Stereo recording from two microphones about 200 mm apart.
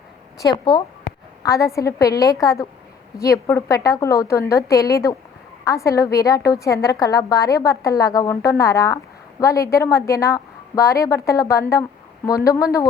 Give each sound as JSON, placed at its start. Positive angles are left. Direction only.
{"t": 0.3, "sound": "a woman's voice", "side_deg": 20}